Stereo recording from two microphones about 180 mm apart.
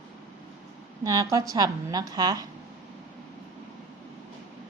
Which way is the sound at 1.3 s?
20° right (ahead or behind).